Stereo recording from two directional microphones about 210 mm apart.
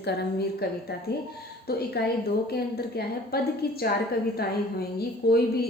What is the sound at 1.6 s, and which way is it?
A woman's voice, 50° left (ahead or behind).